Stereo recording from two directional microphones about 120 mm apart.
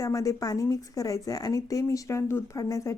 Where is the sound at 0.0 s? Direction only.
25° left (ahead or behind).